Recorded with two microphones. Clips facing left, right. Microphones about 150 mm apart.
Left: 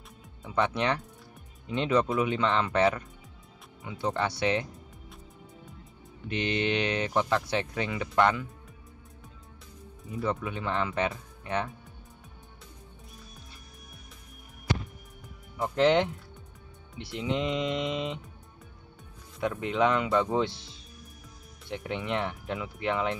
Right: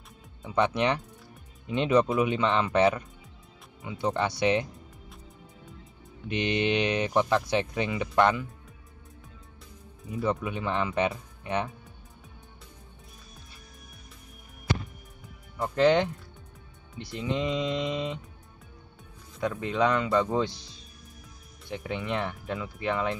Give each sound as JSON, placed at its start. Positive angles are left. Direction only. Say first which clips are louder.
{"t": 0.4, "sound": "speech", "louder": "right 2 dB", "side_deg": -15}
{"t": 6.2, "sound": "speech", "louder": "right 2 dB", "side_deg": -15}
{"t": 10.2, "sound": "speech", "louder": "right 2 dB", "side_deg": -15}
{"t": 15.5, "sound": "speech", "louder": "right 1 dB", "side_deg": 5}
{"t": 17.2, "sound": "speech", "louder": "even", "side_deg": 5}
{"t": 19.4, "sound": "speech", "louder": "even", "side_deg": 5}
{"t": 21.6, "sound": "speech", "louder": "even", "side_deg": 0}